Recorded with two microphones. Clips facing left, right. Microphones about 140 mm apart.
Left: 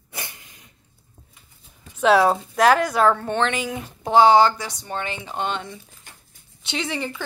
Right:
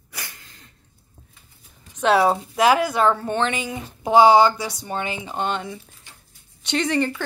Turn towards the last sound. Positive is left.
turn(degrees=0)  # may be behind; listen again after turning